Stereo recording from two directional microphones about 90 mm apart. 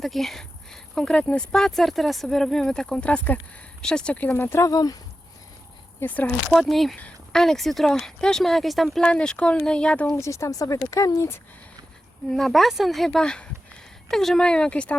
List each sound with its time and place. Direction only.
0.0 s speech: centre (ahead or behind); by 4.7 s 25° left (ahead or behind)
4.7 s speech: 45° left (ahead or behind)
6.0 s speech: 20° left (ahead or behind)
6.5 s speech: centre (ahead or behind)
10.2 s speech: 35° left (ahead or behind)
12.3 s speech: centre (ahead or behind)